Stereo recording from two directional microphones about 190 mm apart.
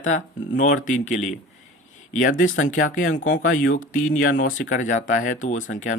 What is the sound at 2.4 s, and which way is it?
Speech, 90° left.